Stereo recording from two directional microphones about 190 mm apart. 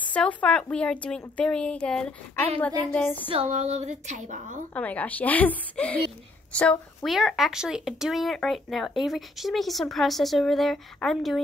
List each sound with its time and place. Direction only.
0.1 s a woman's voice: 5° left (ahead or behind)
3.3 s a woman's voice: 35° right (ahead or behind)
4.7 s a woman's voice: 10° left (ahead or behind)